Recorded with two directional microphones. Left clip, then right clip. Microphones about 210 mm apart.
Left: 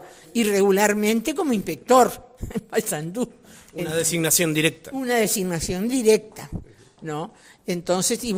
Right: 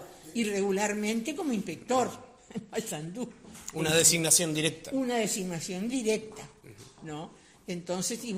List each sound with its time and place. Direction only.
0.3 s speech: 50° left (ahead or behind)
4.0 s speech: 35° left (ahead or behind)